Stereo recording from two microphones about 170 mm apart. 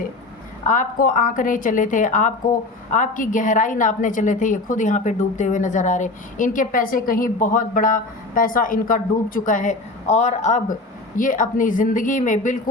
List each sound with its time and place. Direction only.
0.7 s a woman's voice: 50° left (ahead or behind)